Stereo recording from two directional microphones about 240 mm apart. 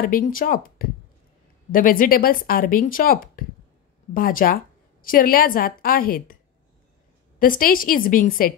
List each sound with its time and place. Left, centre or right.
0.0 s a woman's voice: left
7.3 s a woman's voice: left